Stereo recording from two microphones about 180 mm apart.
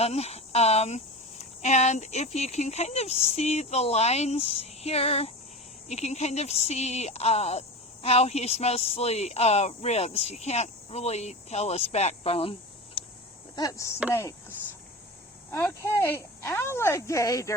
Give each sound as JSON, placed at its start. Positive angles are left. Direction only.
{"t": 0.0, "sound": "speech", "side_deg": 35}
{"t": 13.6, "sound": "speech", "side_deg": 20}
{"t": 15.4, "sound": "speech", "side_deg": 15}